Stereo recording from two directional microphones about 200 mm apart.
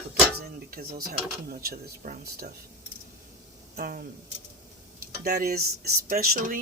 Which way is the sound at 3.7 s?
50° right (ahead or behind).